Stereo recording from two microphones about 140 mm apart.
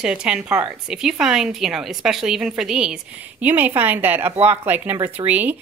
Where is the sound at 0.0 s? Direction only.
5° right (ahead or behind).